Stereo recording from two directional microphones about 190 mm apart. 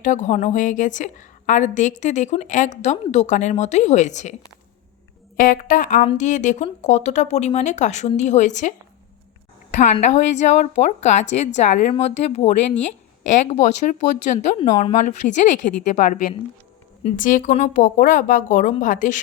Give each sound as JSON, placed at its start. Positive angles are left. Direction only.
{"t": 0.0, "sound": "a woman's voice", "side_deg": 40}
{"t": 5.4, "sound": "a woman's voice", "side_deg": 45}
{"t": 9.7, "sound": "a woman's voice", "side_deg": 40}